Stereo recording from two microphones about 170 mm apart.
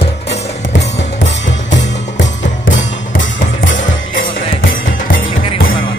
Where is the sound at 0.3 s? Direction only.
85° left.